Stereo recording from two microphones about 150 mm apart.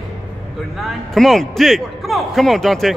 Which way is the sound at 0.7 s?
Centre (ahead or behind).